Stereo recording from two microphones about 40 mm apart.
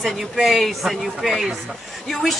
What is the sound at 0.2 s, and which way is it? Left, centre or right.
Speech, centre.